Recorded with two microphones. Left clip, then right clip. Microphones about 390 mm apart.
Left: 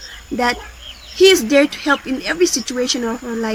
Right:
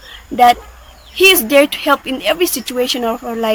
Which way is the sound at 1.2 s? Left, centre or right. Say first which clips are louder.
Right 2 dB; centre.